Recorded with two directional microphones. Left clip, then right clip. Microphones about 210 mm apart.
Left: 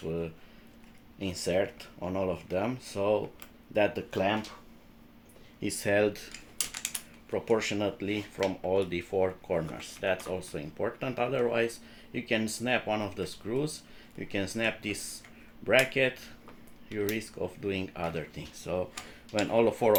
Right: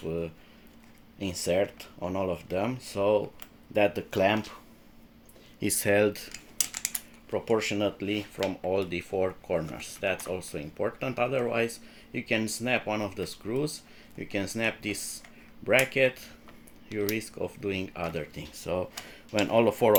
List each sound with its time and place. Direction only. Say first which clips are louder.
1.2 s speech: right 2 dB; 30° right (ahead or behind)
5.5 s speech: right 3 dB; 50° right (ahead or behind)
6.3 s typing: right 3 dB; 15° right (ahead or behind)
7.3 s speech: right 1 dB; 25° right (ahead or behind)